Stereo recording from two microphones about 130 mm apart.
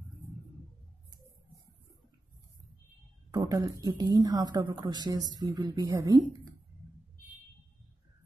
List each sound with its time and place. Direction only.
3.3 s a woman's voice: 30° right (ahead or behind)